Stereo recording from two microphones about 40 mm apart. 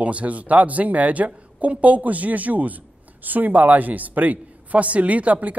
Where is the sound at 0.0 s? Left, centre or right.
Right.